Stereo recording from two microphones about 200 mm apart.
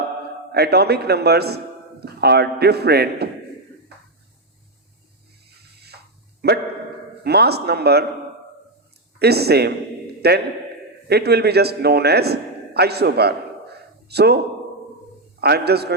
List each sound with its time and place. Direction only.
0.5 s a man's voice: 55° right (ahead or behind)
5.5 s music: 55° right (ahead or behind)
7.3 s a man's voice: 55° right (ahead or behind)
9.1 s a man's voice: 55° right (ahead or behind)